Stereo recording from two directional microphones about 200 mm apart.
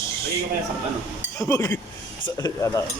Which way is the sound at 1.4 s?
15° left (ahead or behind).